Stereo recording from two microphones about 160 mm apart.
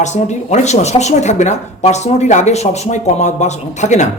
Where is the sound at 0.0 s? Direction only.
45° left (ahead or behind).